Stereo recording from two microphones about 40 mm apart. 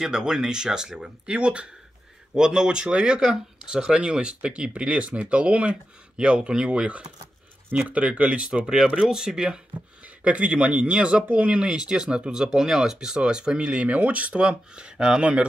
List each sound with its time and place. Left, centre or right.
0.0 s speech: centre
7.9 s speech: right
9.0 s speech: centre; by 11.7 s right
11.7 s speech: centre; by 14.3 s right
14.3 s speech: right